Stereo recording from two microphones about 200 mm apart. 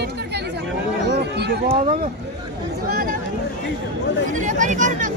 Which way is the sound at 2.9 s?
45° right (ahead or behind).